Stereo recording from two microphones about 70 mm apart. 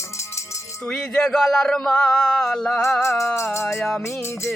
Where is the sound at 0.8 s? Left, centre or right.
Centre.